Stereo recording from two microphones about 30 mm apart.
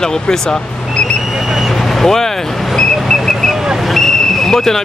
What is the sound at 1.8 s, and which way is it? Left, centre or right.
Vehicle, centre.